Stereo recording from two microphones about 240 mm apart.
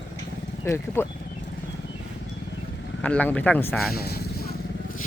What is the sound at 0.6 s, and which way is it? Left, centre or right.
Speech, centre.